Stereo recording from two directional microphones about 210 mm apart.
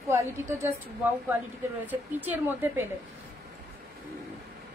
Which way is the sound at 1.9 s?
10° right (ahead or behind).